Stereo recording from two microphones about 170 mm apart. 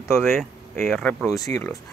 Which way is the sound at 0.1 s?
Centre (ahead or behind).